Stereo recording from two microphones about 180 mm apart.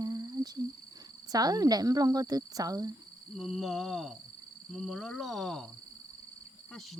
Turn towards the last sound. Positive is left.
turn(degrees=0)  # may be behind; listen again after turning